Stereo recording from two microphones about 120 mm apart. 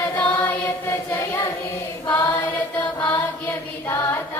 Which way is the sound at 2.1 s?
15° left (ahead or behind).